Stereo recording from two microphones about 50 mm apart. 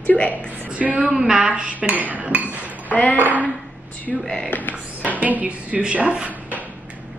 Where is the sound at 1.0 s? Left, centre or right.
Centre.